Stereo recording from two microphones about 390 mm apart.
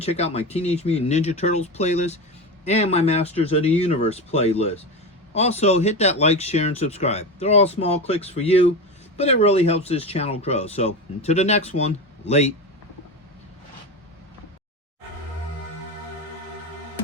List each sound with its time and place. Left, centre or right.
0.0 s speech: centre